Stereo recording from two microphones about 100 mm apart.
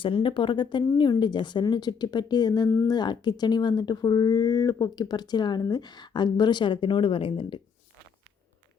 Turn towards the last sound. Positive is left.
turn(degrees=60)  # may be behind; listen again after turning